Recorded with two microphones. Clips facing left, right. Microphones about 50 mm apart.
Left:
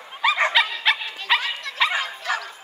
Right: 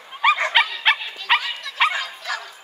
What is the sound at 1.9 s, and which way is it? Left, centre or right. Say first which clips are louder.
Bow-wow: left 2 dB; left.